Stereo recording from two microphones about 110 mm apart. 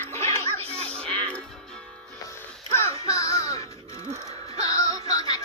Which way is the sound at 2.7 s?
25° left (ahead or behind).